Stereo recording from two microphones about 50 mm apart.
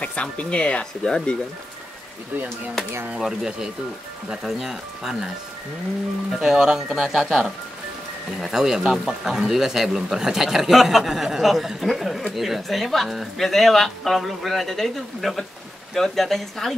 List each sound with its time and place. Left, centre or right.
0.0 s speech: left
3.2 s speech: centre
6.3 s speech: centre